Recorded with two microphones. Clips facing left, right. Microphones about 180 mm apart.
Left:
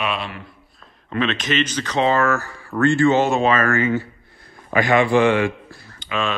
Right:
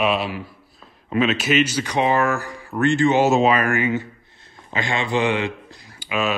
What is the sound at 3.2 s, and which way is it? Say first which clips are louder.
Speech: right 1 dB; 5° right (ahead or behind).